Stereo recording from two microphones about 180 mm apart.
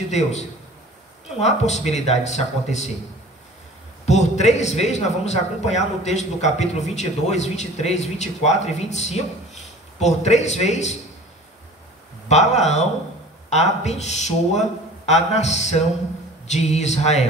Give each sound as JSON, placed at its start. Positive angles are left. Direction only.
{"t": 0.1, "sound": "a man's voice", "side_deg": 40}
{"t": 4.0, "sound": "a man's voice", "side_deg": 40}
{"t": 12.3, "sound": "a man's voice", "side_deg": 40}